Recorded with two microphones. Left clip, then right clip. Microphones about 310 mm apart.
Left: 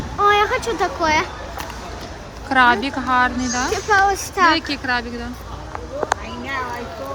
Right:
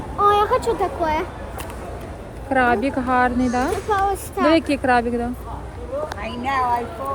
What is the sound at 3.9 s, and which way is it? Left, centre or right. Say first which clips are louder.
Speech: left 4 dB; left.